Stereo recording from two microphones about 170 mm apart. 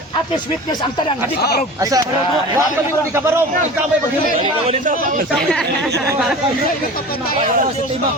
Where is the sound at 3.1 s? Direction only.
15° right (ahead or behind).